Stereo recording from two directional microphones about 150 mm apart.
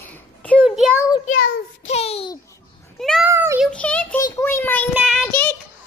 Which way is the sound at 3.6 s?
10° left (ahead or behind).